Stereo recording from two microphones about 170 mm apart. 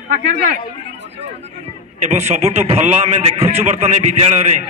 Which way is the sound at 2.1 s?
40° right (ahead or behind).